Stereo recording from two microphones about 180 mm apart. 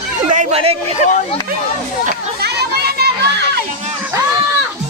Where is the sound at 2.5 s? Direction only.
65° right (ahead or behind).